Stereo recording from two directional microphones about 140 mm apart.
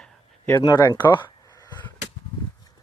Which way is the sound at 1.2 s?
30° left (ahead or behind).